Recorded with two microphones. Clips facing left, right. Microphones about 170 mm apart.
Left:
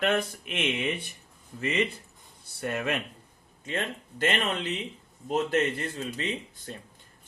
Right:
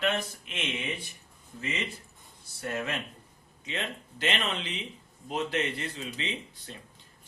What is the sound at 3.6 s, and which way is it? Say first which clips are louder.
A man's voice: left 3 dB; 50° left (ahead or behind).